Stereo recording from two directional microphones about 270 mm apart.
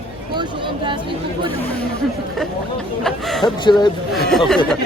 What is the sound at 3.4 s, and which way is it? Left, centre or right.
Speech, centre.